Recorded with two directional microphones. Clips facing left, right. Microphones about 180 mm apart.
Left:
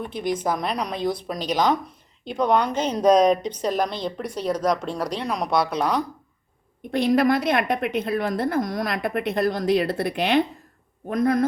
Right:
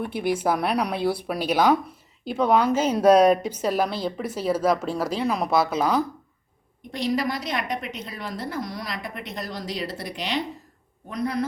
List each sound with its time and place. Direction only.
0.0 s a woman's voice: 10° right (ahead or behind)
6.9 s a woman's voice: 55° left (ahead or behind)
11.1 s hoot: 50° left (ahead or behind)